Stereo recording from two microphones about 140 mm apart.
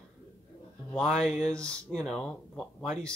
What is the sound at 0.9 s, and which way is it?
Speech, 5° left (ahead or behind).